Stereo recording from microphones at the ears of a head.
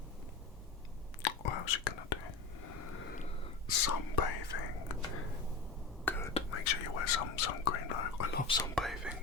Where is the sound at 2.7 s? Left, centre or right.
Left.